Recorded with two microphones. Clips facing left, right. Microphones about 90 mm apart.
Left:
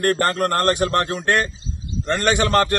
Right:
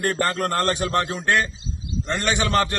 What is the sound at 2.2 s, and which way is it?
Speech, 50° left (ahead or behind).